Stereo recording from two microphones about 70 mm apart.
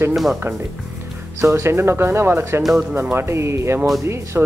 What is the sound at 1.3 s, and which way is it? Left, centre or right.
A man's voice, right.